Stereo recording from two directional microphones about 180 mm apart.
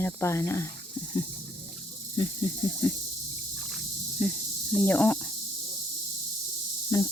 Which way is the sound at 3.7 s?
5° left (ahead or behind).